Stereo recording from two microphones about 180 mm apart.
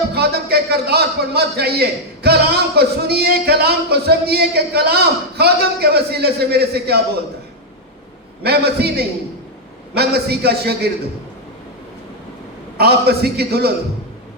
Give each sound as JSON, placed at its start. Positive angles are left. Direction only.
{"t": 0.1, "sound": "a man's voice", "side_deg": -65}
{"t": 8.4, "sound": "a man's voice", "side_deg": -60}
{"t": 12.7, "sound": "a man's voice", "side_deg": -65}